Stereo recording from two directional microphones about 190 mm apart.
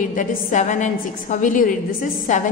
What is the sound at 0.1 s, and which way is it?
A woman's voice, 40° left (ahead or behind).